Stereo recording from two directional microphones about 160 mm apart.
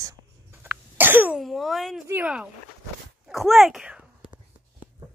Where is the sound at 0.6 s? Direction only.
10° right (ahead or behind).